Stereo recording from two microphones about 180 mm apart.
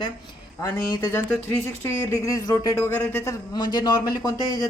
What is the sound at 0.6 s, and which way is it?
Speech, 15° left (ahead or behind).